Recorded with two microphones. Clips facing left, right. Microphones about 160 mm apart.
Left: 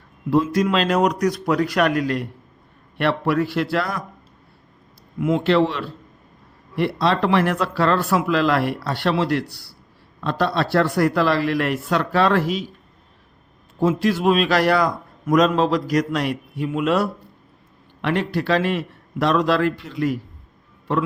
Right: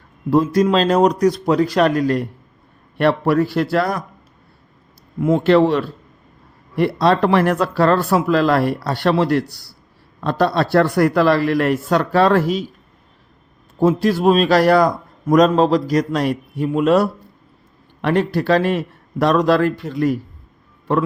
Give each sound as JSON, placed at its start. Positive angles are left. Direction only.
{"t": 0.3, "sound": "a man's voice", "side_deg": -40}
{"t": 5.2, "sound": "speech", "side_deg": -45}
{"t": 13.7, "sound": "a man's voice", "side_deg": -35}